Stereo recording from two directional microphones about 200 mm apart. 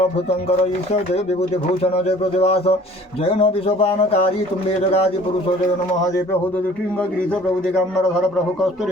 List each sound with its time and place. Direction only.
0.3 s speech: 30° left (ahead or behind)
1.8 s speech: 30° left (ahead or behind)